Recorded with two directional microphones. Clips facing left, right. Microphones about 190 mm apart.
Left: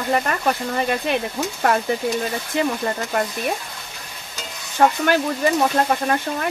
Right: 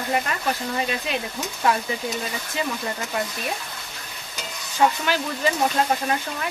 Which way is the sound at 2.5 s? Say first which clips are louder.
Left 6 dB; 50° left (ahead or behind).